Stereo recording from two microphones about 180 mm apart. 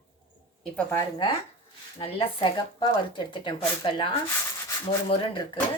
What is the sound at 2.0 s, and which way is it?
Speech, 30° left (ahead or behind).